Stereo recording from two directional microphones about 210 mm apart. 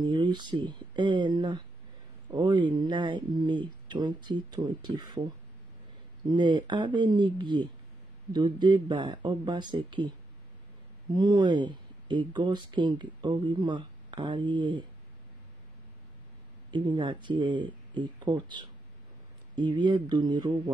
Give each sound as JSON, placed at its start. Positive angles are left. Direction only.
{"t": 0.0, "sound": "speech", "side_deg": -20}
{"t": 6.2, "sound": "speech", "side_deg": -20}
{"t": 11.1, "sound": "speech", "side_deg": -20}
{"t": 16.7, "sound": "speech", "side_deg": -20}